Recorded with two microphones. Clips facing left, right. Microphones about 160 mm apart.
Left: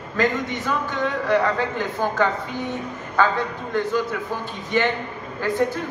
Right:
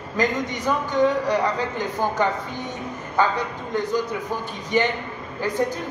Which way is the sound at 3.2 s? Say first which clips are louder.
Left 1 dB; 15° right (ahead or behind).